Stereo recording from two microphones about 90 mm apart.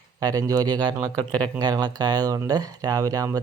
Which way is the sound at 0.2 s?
45° right (ahead or behind).